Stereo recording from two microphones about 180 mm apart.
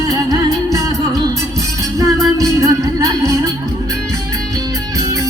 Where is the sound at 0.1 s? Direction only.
20° right (ahead or behind).